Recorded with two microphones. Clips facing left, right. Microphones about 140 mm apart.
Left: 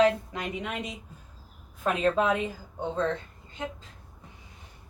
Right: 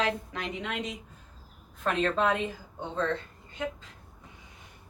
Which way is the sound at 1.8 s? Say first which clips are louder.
Left 2 dB; 5° left (ahead or behind).